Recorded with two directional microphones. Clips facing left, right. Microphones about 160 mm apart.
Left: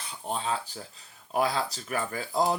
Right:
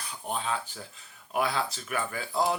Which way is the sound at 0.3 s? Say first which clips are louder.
Left 1 dB; 30° left (ahead or behind).